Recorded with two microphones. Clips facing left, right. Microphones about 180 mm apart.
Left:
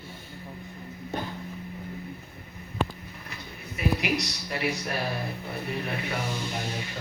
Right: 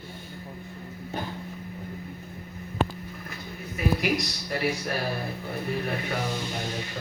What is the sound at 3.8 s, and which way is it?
Speech, 40° right (ahead or behind).